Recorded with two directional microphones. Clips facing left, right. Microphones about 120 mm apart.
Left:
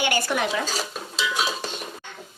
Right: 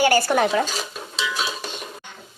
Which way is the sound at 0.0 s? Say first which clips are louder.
Right 6 dB; 40° right (ahead or behind).